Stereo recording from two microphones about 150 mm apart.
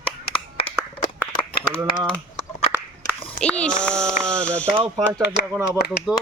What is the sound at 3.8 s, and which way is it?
Speech, 5° left (ahead or behind).